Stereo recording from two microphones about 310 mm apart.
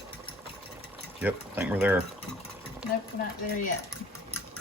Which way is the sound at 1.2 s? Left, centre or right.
Centre.